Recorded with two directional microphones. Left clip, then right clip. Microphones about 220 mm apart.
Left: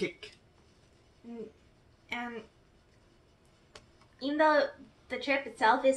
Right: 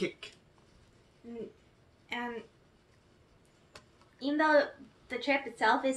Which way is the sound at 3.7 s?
5° left (ahead or behind).